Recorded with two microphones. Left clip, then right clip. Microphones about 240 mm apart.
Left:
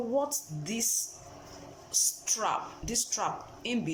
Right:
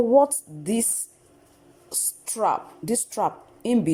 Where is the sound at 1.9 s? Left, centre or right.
Right.